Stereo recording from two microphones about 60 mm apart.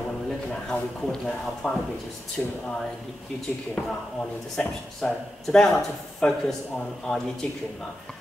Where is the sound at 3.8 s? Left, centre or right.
Left.